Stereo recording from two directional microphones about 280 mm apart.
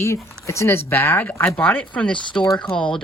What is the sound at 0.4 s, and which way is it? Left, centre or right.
Speech, centre.